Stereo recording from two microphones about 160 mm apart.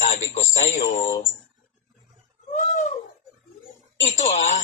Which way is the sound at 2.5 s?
45° left (ahead or behind).